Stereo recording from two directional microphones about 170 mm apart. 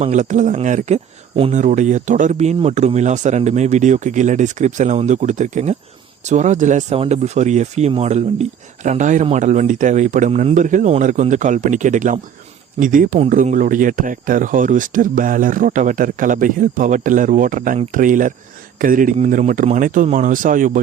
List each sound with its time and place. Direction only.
0.0 s speech: 45° right (ahead or behind)